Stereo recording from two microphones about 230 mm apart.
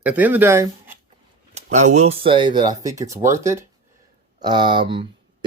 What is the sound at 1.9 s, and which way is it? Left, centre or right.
Speech, right.